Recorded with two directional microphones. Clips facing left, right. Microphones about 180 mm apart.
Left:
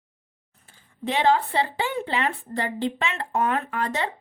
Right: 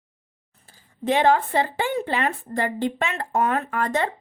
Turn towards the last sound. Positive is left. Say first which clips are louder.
# right 3 dB
turn(degrees=-50)  # may be behind; listen again after turning